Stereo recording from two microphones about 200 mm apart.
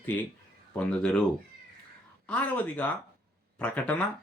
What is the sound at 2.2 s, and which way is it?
Speech, 5° left (ahead or behind).